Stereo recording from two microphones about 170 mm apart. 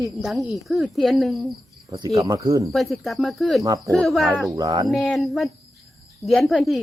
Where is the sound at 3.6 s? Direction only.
20° right (ahead or behind).